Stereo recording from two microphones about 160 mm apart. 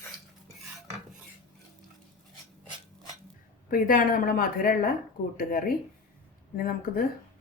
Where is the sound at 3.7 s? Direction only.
60° left (ahead or behind).